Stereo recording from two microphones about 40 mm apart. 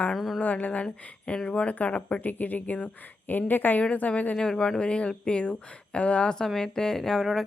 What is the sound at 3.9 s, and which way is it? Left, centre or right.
Speech, left.